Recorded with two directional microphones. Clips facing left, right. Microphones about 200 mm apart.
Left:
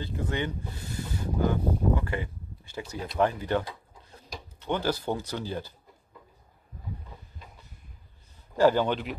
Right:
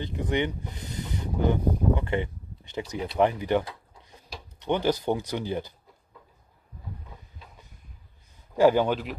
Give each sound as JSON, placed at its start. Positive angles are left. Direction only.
{"t": 0.0, "sound": "speech", "side_deg": -20}
{"t": 8.5, "sound": "speech", "side_deg": -10}